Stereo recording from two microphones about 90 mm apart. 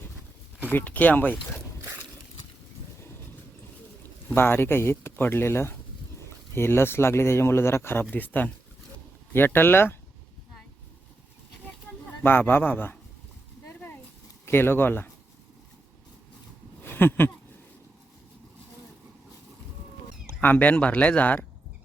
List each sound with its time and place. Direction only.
0.7 s a man's voice: 20° left (ahead or behind)
4.4 s a man's voice: 25° left (ahead or behind)
12.2 s a man's voice: 25° left (ahead or behind)
13.7 s a sound: 20° left (ahead or behind)
14.4 s a man's voice: 25° left (ahead or behind)
16.8 s a sound: 25° left (ahead or behind)
20.2 s speech: 20° left (ahead or behind)